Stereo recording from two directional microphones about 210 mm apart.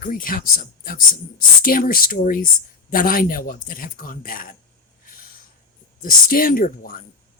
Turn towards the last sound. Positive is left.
turn(degrees=40)  # may be behind; listen again after turning